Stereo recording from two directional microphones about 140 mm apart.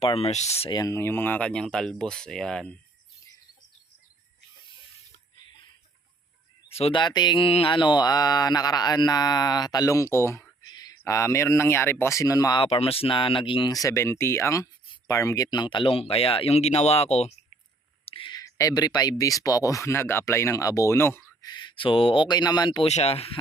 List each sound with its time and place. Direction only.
0.0 s speech: 45° left (ahead or behind)
0.7 s speech: 25° left (ahead or behind); by 2.7 s 5° left (ahead or behind)
6.7 s speech: 45° left (ahead or behind); by 12.6 s 25° left (ahead or behind)
12.6 s speech: 45° left (ahead or behind)
18.0 s a sound: 40° left (ahead or behind)
19.2 s speech: 25° left (ahead or behind)
21.4 s speech: 30° left (ahead or behind)
22.8 s speech: 50° left (ahead or behind)